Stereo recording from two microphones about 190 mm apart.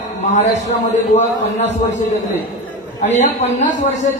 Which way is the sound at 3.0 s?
35° left (ahead or behind).